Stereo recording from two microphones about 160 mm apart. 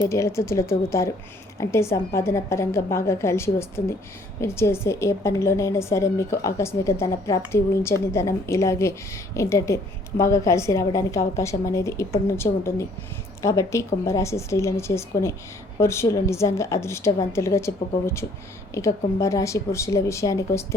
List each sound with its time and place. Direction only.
0.1 s a woman's voice: 20° left (ahead or behind)